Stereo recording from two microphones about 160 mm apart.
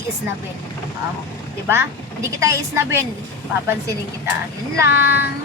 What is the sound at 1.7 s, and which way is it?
Speech, 15° right (ahead or behind).